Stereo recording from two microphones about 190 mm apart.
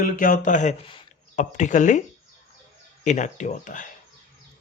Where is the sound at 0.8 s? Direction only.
25° left (ahead or behind).